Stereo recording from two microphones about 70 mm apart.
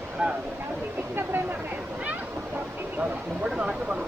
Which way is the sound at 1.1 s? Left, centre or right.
Right.